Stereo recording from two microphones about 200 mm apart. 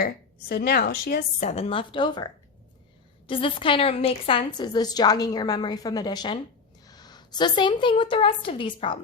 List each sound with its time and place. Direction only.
0.0 s a woman's voice: 50° left (ahead or behind); by 2.2 s 20° left (ahead or behind)
3.2 s a woman's voice: 25° left (ahead or behind)